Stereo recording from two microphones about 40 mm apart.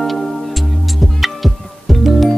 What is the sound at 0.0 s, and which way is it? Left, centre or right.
Music, centre.